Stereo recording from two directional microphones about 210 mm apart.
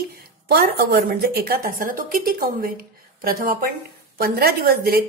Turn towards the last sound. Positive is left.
turn(degrees=-45)  # may be behind; listen again after turning